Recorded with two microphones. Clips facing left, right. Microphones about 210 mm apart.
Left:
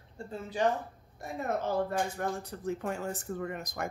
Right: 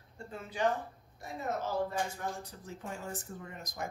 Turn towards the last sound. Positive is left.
turn(degrees=65)  # may be behind; listen again after turning